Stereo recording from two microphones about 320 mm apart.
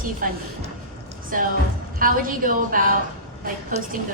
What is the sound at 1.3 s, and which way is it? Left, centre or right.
Speech, right.